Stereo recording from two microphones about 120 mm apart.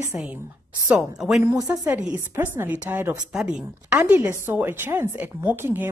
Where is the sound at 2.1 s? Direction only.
15° right (ahead or behind).